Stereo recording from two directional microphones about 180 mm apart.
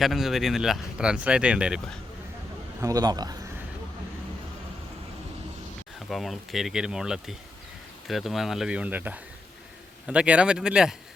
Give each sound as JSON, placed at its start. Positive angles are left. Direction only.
{"t": 0.0, "sound": "speech", "side_deg": 0}
{"t": 2.8, "sound": "a man's voice", "side_deg": -20}
{"t": 6.1, "sound": "speech", "side_deg": 0}